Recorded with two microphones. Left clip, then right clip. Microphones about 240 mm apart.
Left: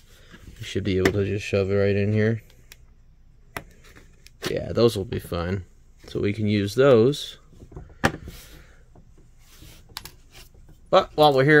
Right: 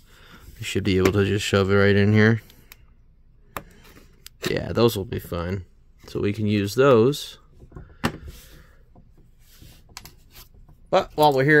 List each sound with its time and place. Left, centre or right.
0.1 s speech: centre
4.2 s a sound: centre
6.1 s speech: centre
10.9 s speech: centre